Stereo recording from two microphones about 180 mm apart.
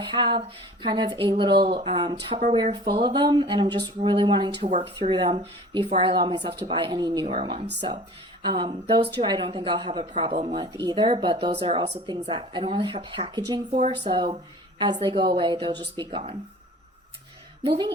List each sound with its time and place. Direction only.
0.0 s speech: 25° right (ahead or behind)
4.6 s speech: 40° right (ahead or behind)
7.3 s speech: 35° right (ahead or behind)
10.3 s speech: 40° right (ahead or behind)
10.6 s speech: 20° right (ahead or behind)
13.7 s speech: 40° right (ahead or behind)
14.0 s speech: 25° right (ahead or behind)
17.6 s speech: 30° right (ahead or behind)